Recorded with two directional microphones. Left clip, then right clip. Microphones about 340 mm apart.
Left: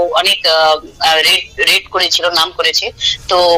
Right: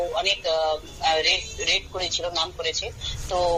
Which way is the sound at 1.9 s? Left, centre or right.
Left.